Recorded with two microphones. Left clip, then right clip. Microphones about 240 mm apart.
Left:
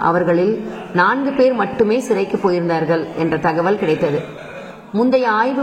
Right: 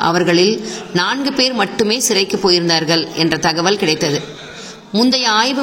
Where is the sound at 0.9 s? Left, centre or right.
Right.